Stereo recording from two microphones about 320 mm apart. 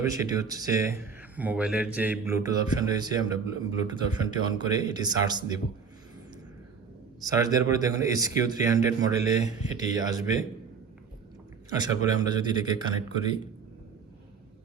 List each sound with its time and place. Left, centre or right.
0.0 s a man's voice: centre
7.3 s a man's voice: centre
11.7 s a man's voice: centre